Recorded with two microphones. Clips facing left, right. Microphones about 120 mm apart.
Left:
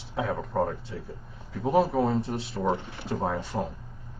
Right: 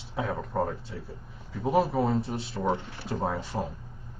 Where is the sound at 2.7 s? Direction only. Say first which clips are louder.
Left 1 dB; 20° left (ahead or behind).